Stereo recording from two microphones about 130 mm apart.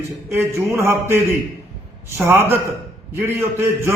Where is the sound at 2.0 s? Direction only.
15° right (ahead or behind).